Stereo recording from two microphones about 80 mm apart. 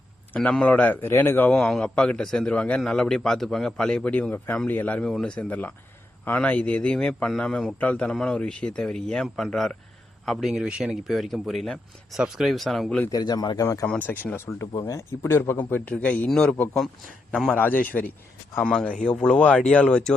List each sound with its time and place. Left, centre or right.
0.3 s a man's voice: centre
0.8 s a man's voice: left
1.5 s a man's voice: centre
11.0 s speech: centre
13.1 s a man's voice: left
13.6 s speech: left
14.0 s a man's voice: left; by 17.5 s centre
17.5 s a man's voice: left